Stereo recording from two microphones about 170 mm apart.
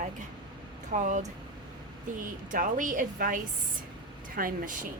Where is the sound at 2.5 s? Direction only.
55° right (ahead or behind).